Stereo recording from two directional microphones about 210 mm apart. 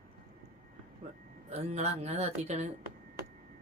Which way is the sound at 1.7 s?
30° right (ahead or behind).